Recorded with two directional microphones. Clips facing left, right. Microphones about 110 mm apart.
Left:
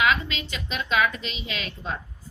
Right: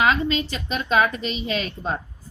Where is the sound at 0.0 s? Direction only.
35° right (ahead or behind).